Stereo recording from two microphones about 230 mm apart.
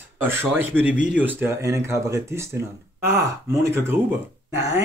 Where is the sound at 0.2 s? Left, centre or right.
Centre.